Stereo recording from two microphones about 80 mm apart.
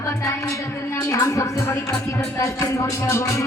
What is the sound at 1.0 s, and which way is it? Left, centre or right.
Music, left.